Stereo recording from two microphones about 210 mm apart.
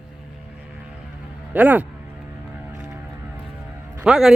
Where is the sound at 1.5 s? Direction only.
10° right (ahead or behind).